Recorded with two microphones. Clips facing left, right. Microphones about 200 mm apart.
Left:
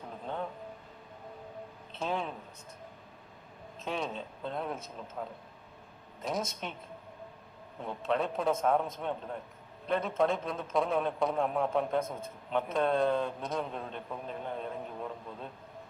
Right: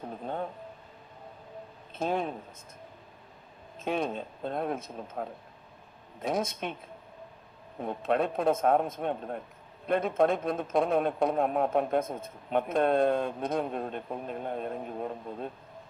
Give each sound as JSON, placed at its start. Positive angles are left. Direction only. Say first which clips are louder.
{"t": 1.9, "sound": "speech", "louder": "right 4 dB", "side_deg": -50}
{"t": 3.8, "sound": "a man's voice", "louder": "right 5 dB", "side_deg": -55}
{"t": 7.8, "sound": "a man's voice", "louder": "right 4 dB", "side_deg": -55}